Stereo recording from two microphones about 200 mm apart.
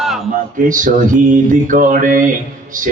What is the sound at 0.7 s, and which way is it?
Mantra, 40° right (ahead or behind).